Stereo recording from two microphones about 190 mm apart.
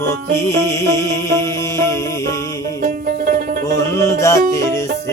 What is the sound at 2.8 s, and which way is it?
Music, 50° right (ahead or behind).